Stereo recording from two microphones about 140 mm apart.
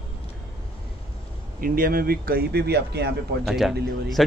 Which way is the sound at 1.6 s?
90° right.